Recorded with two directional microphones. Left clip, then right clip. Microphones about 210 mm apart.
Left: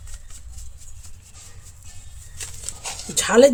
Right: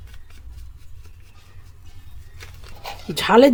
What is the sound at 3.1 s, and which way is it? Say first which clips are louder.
Dog: right 1 dB; 30° right (ahead or behind).